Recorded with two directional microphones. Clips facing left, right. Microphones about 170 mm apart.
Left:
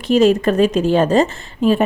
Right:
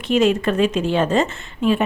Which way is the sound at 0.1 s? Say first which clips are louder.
Left 4 dB; 40° left (ahead or behind).